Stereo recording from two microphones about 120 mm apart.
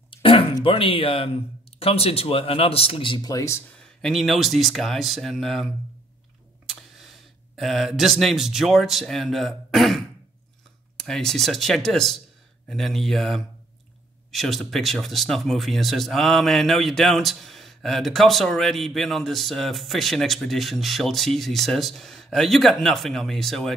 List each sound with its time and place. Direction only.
0.2 s a sound: 45° left (ahead or behind)
0.7 s speech: 50° left (ahead or behind); by 3.6 s 25° left (ahead or behind)
3.7 s speech: 5° left (ahead or behind)